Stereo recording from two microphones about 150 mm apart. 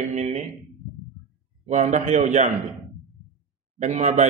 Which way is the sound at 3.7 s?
50° right (ahead or behind).